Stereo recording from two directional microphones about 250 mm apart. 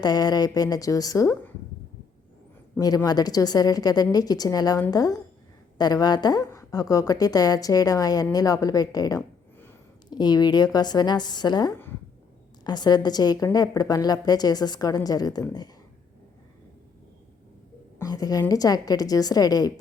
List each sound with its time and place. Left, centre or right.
0.0 s a woman's voice: centre
2.7 s a woman's voice: centre
18.0 s a woman's voice: centre